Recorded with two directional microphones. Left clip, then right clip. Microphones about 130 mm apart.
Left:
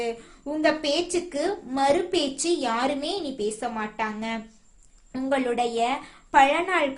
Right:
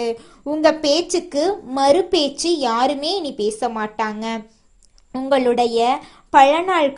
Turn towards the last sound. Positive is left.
turn(degrees=-50)  # may be behind; listen again after turning